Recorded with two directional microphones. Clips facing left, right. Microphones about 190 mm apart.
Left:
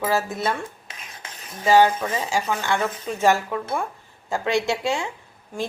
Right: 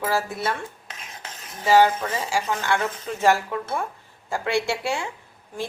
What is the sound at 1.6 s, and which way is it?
Speech, 15° left (ahead or behind).